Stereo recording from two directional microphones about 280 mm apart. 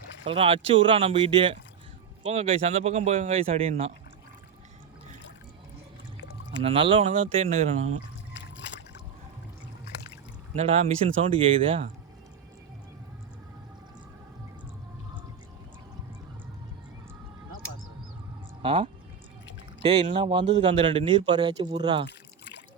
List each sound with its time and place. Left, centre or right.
0.3 s speech: centre
6.6 s speech: right
8.3 s trickle: left
10.5 s speech: right
18.6 s speech: centre
22.0 s trickle: left